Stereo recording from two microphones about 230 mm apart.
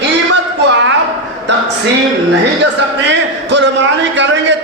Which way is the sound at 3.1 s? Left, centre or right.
Right.